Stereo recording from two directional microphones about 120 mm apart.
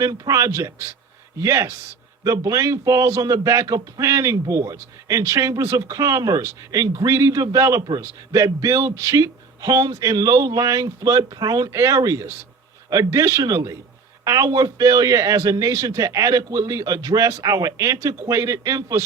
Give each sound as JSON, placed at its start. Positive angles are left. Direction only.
{"t": 0.0, "sound": "speech", "side_deg": -30}
{"t": 7.8, "sound": "a man's voice", "side_deg": -35}